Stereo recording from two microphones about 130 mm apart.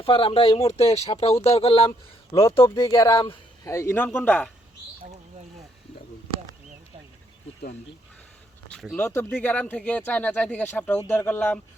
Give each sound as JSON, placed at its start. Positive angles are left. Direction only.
{"t": 0.0, "sound": "speech", "side_deg": 45}
{"t": 2.4, "sound": "speech", "side_deg": 20}
{"t": 8.7, "sound": "a sound", "side_deg": 5}
{"t": 9.0, "sound": "speech", "side_deg": 20}